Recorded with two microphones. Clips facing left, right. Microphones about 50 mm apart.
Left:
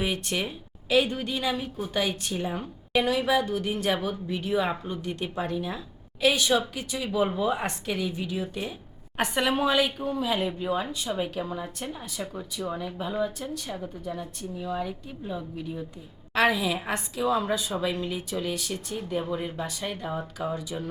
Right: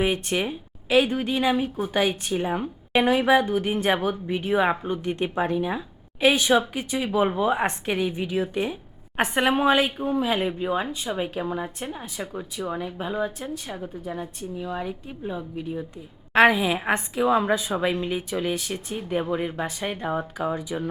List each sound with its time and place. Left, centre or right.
0.0 s a woman's voice: right
10.8 s speech: centre
11.2 s a woman's voice: right